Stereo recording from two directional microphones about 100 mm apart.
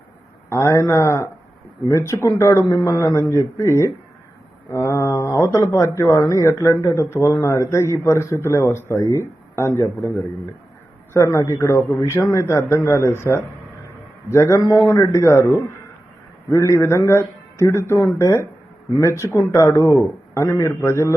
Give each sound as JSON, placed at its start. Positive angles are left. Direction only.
{"t": 0.5, "sound": "a man's voice", "side_deg": 30}
{"t": 11.1, "sound": "a man's voice", "side_deg": 30}